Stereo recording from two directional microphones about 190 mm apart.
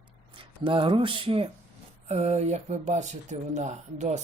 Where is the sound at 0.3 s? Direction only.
25° right (ahead or behind).